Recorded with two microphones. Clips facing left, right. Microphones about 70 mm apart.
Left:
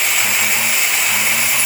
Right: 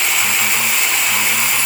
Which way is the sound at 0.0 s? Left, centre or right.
Centre.